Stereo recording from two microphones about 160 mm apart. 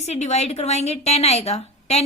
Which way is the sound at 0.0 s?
45° left (ahead or behind).